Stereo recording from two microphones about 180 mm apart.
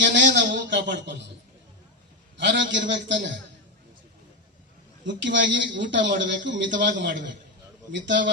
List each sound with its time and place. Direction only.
0.0 s a sound: 85° right
2.4 s a man's voice: 80° right
5.0 s a man's voice: 85° right